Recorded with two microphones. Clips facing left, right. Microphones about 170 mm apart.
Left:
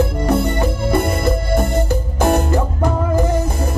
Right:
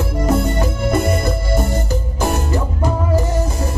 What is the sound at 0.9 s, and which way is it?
Music, 55° left (ahead or behind).